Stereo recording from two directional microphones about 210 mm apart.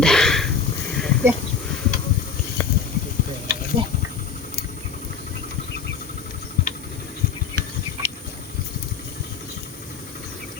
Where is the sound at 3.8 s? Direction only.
25° right (ahead or behind).